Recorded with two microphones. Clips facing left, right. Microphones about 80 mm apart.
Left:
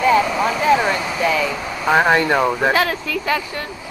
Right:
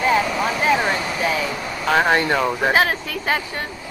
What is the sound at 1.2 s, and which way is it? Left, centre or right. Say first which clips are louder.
Speech: left 5 dB; centre.